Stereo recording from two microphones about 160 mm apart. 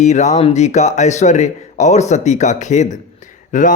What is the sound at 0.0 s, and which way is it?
Speech, 45° left (ahead or behind).